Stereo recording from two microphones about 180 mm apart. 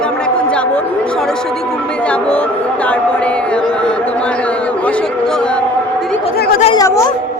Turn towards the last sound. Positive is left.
turn(degrees=15)  # may be behind; listen again after turning